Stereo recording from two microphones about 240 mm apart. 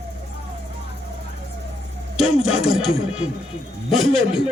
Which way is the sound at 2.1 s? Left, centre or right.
Left.